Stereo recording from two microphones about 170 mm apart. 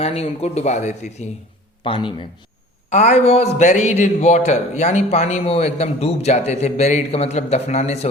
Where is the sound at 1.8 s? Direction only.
30° left (ahead or behind).